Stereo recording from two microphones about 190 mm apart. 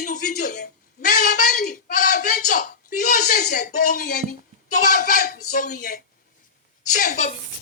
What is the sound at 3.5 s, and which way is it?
Speech, 45° left (ahead or behind).